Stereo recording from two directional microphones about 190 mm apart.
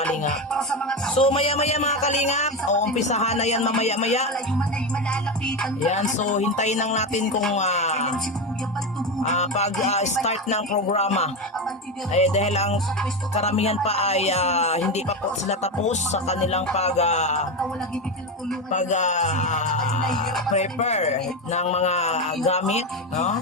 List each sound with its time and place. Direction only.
0.5 s music: 5° left (ahead or behind)
1.1 s speech: 30° left (ahead or behind)
5.8 s speech: 40° left (ahead or behind)
9.2 s speech: 35° left (ahead or behind)
18.7 s speech: 40° left (ahead or behind)